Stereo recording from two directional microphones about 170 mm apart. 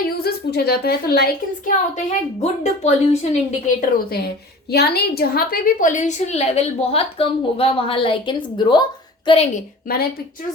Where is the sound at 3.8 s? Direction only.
55° left (ahead or behind).